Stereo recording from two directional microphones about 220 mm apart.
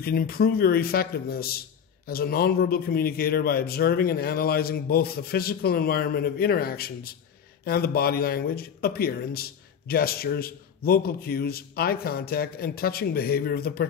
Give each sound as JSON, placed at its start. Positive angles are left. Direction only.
{"t": 0.0, "sound": "speech", "side_deg": 45}